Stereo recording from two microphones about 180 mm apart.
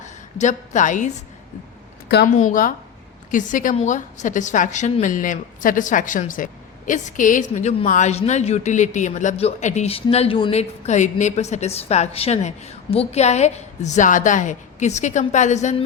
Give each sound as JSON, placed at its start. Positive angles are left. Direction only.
{"t": 0.0, "sound": "a woman's voice", "side_deg": 40}
{"t": 2.2, "sound": "a woman's voice", "side_deg": 45}